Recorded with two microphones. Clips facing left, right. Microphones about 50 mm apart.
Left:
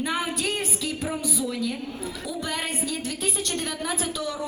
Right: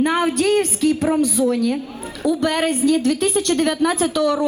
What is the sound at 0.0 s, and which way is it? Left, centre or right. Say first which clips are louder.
A woman's voice: right 10 dB; right.